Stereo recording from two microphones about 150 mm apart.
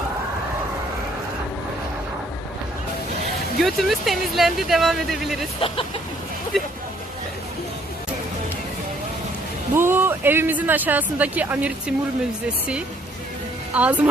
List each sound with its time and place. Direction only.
3.6 s speech: centre (ahead or behind)
5.5 s speech: 40° left (ahead or behind)
6.5 s hubbub: centre (ahead or behind)
9.7 s speech: 15° right (ahead or behind)
13.7 s speech: 10° right (ahead or behind)